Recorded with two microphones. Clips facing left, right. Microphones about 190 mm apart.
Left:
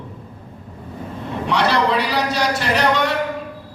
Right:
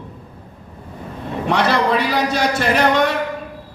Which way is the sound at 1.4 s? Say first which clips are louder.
Right 1 dB; 50° right (ahead or behind).